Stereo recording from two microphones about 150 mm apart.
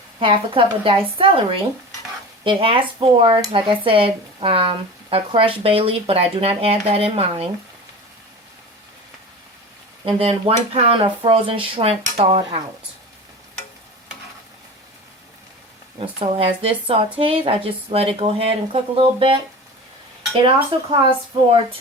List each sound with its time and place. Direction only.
0.2 s speech: 35° right (ahead or behind)
10.1 s speech: 35° right (ahead or behind)
16.0 s speech: 40° right (ahead or behind)
20.4 s speech: 35° right (ahead or behind)